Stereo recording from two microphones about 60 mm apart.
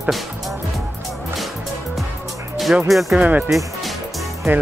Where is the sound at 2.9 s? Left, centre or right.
Centre.